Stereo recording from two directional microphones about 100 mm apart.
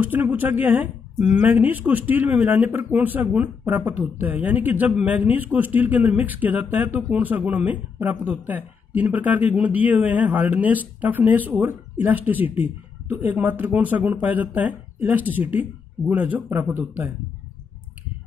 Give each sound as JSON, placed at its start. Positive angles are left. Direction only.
{"t": 0.0, "sound": "a man's voice", "side_deg": -20}